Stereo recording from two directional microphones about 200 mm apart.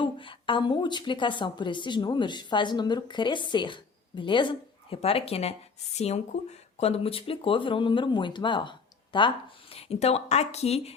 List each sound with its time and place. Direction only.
0.0 s a woman's voice: 25° left (ahead or behind)